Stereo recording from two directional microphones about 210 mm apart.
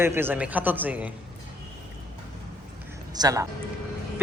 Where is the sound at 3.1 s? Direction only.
15° right (ahead or behind).